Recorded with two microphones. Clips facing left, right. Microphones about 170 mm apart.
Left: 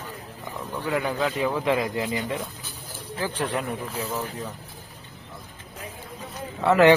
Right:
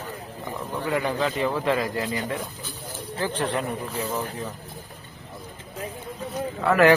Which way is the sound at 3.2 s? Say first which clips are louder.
Right 1 dB; 10° left (ahead or behind).